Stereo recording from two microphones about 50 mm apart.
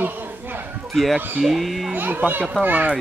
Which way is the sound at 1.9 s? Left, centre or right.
Right.